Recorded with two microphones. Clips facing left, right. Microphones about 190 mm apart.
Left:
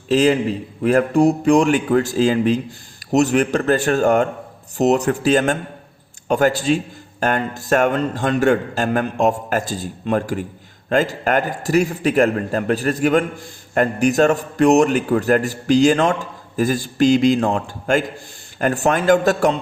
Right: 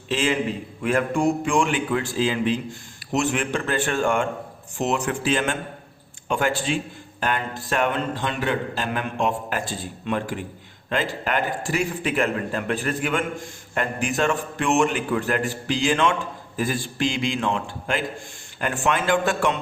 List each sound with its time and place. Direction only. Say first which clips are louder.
0.1 s a man's voice: left 8 dB; 40° left (ahead or behind)